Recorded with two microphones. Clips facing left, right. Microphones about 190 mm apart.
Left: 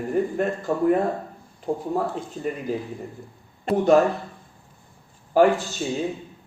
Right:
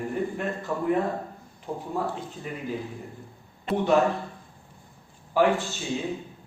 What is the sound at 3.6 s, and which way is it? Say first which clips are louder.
Speech: left 5 dB; 40° left (ahead or behind).